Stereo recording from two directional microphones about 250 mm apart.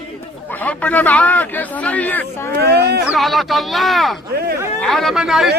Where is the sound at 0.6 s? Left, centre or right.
Centre.